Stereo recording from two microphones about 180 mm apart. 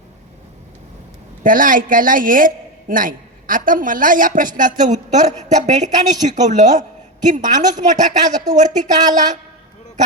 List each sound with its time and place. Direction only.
1.5 s a man's voice: 50° right (ahead or behind)